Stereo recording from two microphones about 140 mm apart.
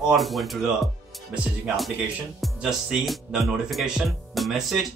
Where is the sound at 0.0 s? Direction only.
Centre (ahead or behind).